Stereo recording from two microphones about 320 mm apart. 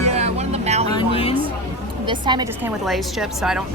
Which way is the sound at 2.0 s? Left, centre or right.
Centre.